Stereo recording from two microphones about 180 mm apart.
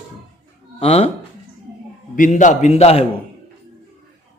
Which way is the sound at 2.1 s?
45° left (ahead or behind).